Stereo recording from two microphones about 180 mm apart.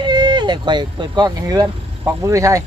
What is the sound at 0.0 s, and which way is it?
Speech, 25° right (ahead or behind).